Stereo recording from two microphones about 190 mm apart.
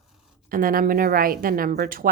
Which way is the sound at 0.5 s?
50° right (ahead or behind).